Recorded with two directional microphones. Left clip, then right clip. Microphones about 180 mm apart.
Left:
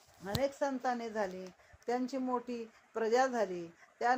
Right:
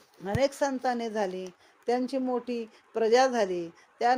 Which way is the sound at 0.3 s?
35° right (ahead or behind).